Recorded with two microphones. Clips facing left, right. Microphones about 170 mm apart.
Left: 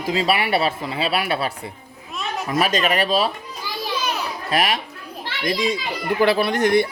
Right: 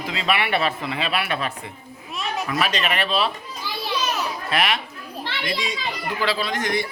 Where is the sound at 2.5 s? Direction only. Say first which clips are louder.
Left 5 dB; 45° left (ahead or behind).